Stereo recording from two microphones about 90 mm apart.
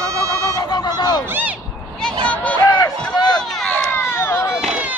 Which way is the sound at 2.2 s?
15° left (ahead or behind).